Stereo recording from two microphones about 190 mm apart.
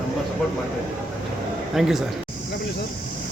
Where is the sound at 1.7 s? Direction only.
Centre (ahead or behind).